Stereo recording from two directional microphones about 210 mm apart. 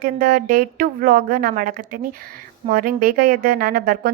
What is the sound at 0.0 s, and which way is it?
A woman's voice, 40° right (ahead or behind).